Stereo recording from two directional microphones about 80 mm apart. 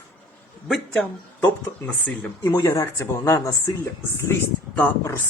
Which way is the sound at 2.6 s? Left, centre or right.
Left.